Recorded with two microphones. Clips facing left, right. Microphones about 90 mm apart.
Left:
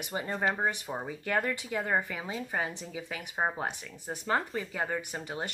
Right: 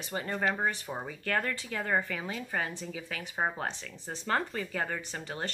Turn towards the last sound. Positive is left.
turn(degrees=15)  # may be behind; listen again after turning